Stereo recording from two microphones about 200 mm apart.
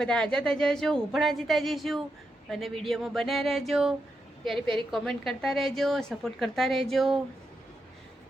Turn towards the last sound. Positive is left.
turn(degrees=0)  # may be behind; listen again after turning